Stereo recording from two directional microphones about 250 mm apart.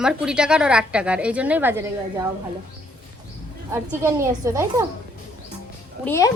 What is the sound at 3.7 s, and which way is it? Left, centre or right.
A woman's voice, centre.